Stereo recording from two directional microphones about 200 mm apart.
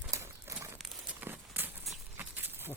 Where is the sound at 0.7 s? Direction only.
5° right (ahead or behind).